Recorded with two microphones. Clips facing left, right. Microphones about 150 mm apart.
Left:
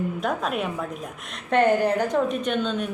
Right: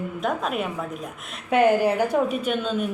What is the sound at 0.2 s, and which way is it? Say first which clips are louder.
A woman's voice: right 4 dB; centre (ahead or behind).